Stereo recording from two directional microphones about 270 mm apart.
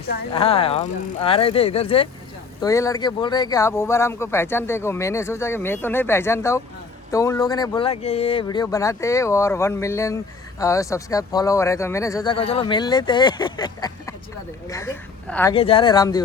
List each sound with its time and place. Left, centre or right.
0.3 s a woman's voice: left
15.5 s speech: left